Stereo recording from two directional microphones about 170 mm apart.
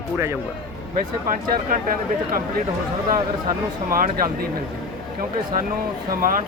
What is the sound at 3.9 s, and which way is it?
Speech, 55° right (ahead or behind).